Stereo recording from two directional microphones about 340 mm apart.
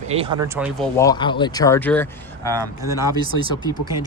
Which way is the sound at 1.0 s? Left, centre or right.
Centre.